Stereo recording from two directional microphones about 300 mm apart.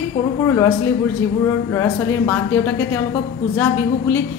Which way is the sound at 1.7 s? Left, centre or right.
Centre.